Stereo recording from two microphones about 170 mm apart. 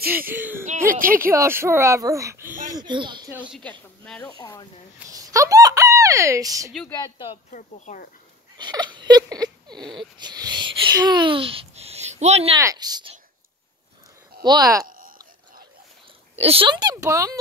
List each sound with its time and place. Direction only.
0.1 s a child's voice: 10° right (ahead or behind); by 3.3 s 25° right (ahead or behind)
3.3 s a child's voice: 5° right (ahead or behind)
4.0 s speech: 5° left (ahead or behind)
4.3 s speech: 20° left (ahead or behind)
5.1 s fowl: 20° right (ahead or behind)
6.9 s speech: 25° left (ahead or behind)
7.5 s speech: 50° left (ahead or behind)
8.5 s speech: 25° right (ahead or behind)
12.5 s speech: 20° right (ahead or behind)
14.4 s speech: 20° right (ahead or behind)
14.9 s a sound: 55° right (ahead or behind)
16.3 s speech: 35° right (ahead or behind); by 17.4 s 20° right (ahead or behind)